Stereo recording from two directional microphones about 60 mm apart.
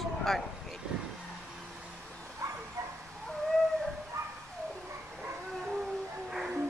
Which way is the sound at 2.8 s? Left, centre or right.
Right.